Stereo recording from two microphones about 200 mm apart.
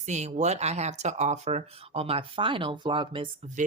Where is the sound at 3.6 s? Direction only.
40° right (ahead or behind).